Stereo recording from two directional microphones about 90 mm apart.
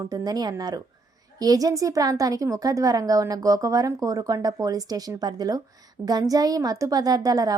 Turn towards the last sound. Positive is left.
turn(degrees=-45)  # may be behind; listen again after turning